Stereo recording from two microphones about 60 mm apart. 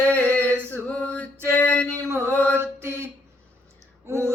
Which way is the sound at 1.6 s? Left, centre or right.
Centre.